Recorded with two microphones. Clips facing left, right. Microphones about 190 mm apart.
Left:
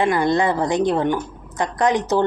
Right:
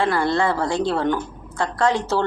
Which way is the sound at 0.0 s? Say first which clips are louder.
Left 2 dB; 20° left (ahead or behind).